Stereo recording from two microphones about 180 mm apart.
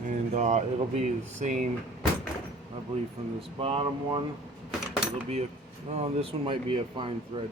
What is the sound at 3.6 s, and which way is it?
Speech, 30° right (ahead or behind).